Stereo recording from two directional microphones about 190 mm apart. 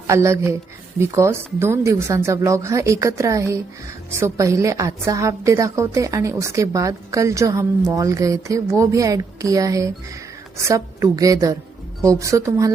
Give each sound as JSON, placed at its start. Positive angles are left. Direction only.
{"t": 0.1, "sound": "a woman's voice", "side_deg": -15}